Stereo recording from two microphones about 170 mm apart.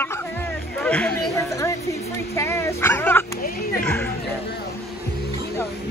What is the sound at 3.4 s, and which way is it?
Music, 60° left (ahead or behind).